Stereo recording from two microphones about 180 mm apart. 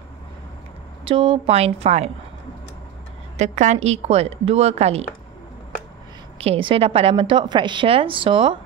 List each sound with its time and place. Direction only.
1.0 s a woman's voice: 30° right (ahead or behind)
3.3 s a woman's voice: 40° right (ahead or behind)
6.3 s a woman's voice: 35° right (ahead or behind)